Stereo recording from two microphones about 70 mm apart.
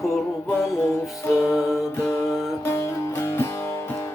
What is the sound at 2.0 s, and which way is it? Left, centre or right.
Music, left.